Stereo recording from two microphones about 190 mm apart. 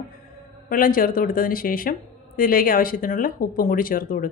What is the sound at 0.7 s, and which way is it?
Speech, 50° left (ahead or behind).